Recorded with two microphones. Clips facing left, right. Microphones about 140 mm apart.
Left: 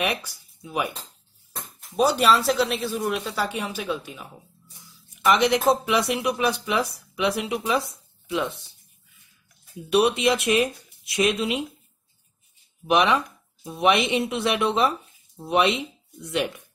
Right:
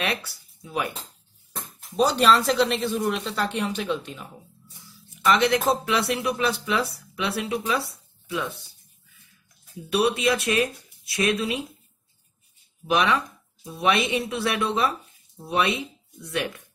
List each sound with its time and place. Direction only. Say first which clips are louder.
0.0 s speech: left 2 dB; 15° left (ahead or behind)
9.8 s speech: left 3 dB; 20° left (ahead or behind)
12.9 s speech: left 2 dB; 20° left (ahead or behind)